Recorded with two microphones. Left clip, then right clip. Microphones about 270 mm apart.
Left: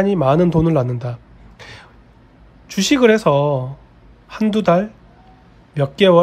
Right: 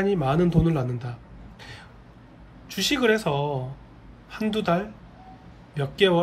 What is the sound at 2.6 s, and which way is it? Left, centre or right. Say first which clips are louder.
Speech: left 9 dB; left.